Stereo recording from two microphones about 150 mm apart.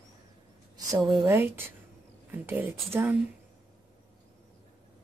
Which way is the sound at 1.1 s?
15° right (ahead or behind).